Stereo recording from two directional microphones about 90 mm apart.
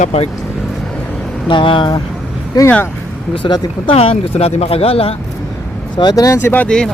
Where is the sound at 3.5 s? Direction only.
80° left.